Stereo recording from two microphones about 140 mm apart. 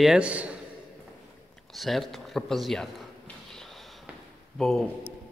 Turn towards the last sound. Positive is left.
turn(degrees=5)  # may be behind; listen again after turning